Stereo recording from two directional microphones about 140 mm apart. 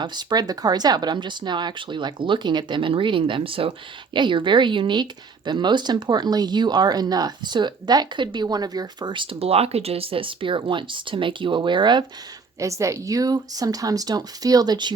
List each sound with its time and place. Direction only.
0.0 s speech: 30° right (ahead or behind)
12.5 s speech: 20° right (ahead or behind)